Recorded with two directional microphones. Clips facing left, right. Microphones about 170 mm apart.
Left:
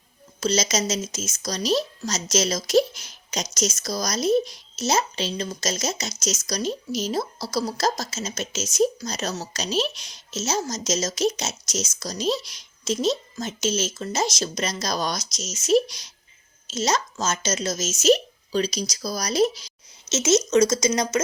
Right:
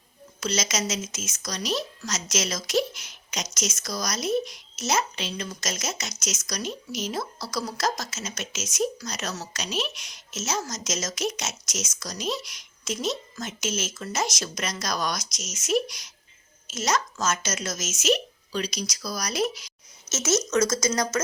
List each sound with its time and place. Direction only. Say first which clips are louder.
0.3 s a woman's voice: left 5 dB; 30° left (ahead or behind)
20.1 s speech: left 5 dB; 20° left (ahead or behind)